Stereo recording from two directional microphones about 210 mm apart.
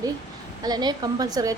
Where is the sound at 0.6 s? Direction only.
20° right (ahead or behind).